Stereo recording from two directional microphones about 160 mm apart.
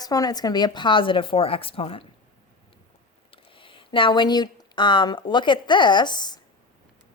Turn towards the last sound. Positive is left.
turn(degrees=25)  # may be behind; listen again after turning